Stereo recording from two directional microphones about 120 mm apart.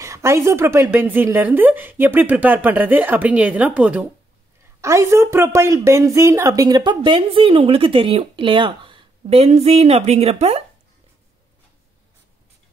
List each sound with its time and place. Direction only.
0.0 s a woman's voice: 25° right (ahead or behind)
4.8 s a woman's voice: 25° right (ahead or behind); by 10.6 s 60° right (ahead or behind)